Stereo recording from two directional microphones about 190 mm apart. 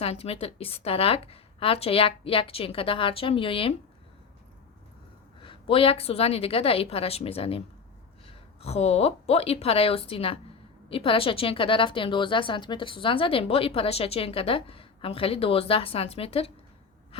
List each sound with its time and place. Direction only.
0.0 s a woman's voice: 30° left (ahead or behind)
5.4 s a woman's voice: 25° left (ahead or behind)
8.6 s a woman's voice: 35° left (ahead or behind)